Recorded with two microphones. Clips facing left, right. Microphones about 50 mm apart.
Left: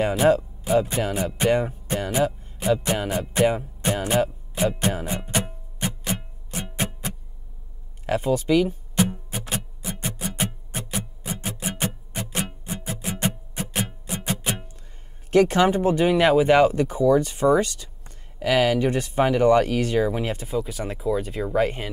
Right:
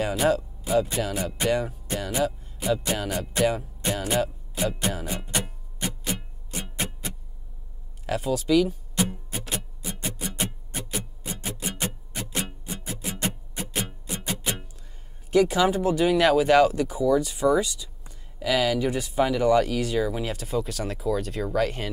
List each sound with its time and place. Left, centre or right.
0.2 s speech: centre
4.6 s music: left
8.1 s speech: left
9.5 s music: left
9.8 s music: centre
10.9 s music: left
15.3 s speech: left
20.4 s speech: centre